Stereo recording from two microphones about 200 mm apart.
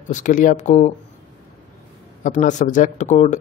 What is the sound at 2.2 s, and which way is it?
A man's voice, 35° left (ahead or behind).